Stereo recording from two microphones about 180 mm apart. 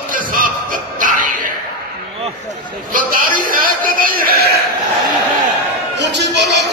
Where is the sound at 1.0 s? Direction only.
50° right (ahead or behind).